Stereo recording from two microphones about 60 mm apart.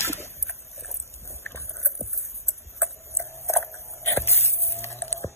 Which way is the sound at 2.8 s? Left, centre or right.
Left.